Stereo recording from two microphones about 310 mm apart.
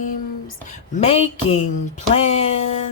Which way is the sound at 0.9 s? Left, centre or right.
Centre.